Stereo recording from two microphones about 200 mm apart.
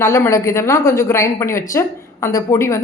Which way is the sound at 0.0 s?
15° left (ahead or behind).